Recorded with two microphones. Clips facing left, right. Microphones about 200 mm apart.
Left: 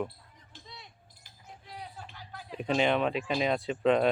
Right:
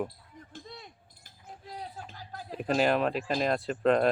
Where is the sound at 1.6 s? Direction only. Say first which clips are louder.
Right 3 dB; 40° right (ahead or behind).